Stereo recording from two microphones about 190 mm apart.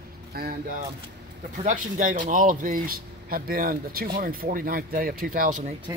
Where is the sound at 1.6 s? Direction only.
40° right (ahead or behind).